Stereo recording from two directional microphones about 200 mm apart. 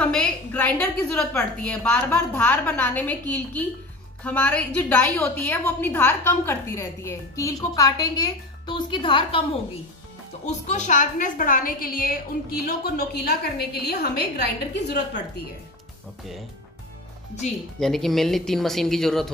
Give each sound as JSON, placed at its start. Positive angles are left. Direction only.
{"t": 0.0, "sound": "a woman's voice", "side_deg": 5}
{"t": 17.7, "sound": "speech", "side_deg": 0}